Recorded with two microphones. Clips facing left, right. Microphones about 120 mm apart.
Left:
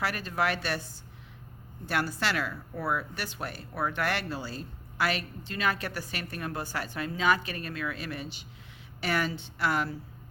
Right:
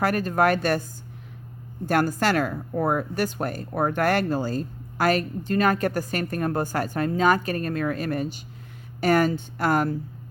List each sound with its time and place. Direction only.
0.0 s speech: 45° right (ahead or behind)
1.9 s speech: 45° right (ahead or behind)